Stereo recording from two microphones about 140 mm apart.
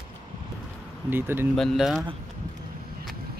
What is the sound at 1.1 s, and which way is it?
Speech, 15° right (ahead or behind).